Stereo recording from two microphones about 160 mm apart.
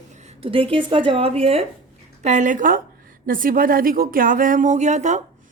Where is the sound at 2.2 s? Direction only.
50° right (ahead or behind).